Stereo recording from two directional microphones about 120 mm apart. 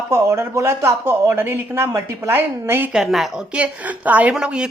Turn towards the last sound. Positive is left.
turn(degrees=-5)  # may be behind; listen again after turning